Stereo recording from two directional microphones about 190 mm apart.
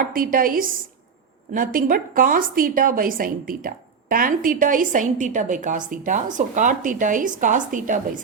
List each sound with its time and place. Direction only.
0.0 s a woman's voice: 50° right (ahead or behind)